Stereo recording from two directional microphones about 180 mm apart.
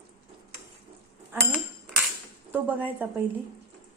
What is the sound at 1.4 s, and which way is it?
Speech, 5° left (ahead or behind).